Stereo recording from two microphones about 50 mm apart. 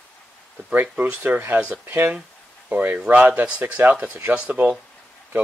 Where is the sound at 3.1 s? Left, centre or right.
Right.